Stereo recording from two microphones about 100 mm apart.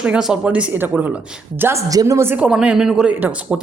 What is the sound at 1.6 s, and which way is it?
Speech, 30° right (ahead or behind).